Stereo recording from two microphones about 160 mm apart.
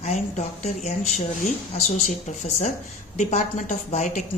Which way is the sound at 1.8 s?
45° left (ahead or behind).